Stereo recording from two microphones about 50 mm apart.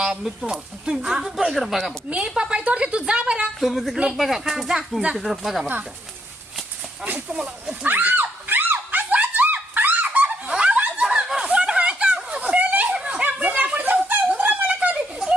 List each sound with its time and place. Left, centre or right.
0.0 s speech: centre
2.0 s a woman's voice: right
3.6 s speech: centre
7.3 s a woman's voice: centre
7.9 s a sound: right
10.5 s snicker: right
11.0 s snicker: centre
13.2 s a sound: right